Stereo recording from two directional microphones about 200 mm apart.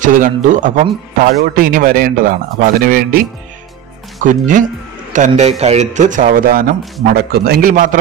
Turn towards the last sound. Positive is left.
turn(degrees=-40)  # may be behind; listen again after turning